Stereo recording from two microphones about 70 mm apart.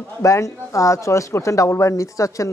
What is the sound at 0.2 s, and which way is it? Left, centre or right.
Speech, left.